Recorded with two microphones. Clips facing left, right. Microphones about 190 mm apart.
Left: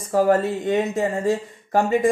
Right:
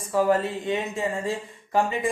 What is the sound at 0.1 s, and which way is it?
Speech, 45° left (ahead or behind).